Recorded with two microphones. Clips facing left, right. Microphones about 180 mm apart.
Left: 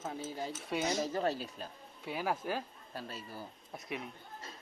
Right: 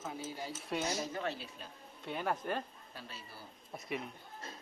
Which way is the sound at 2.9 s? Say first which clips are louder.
Left 6 dB; 40° left (ahead or behind).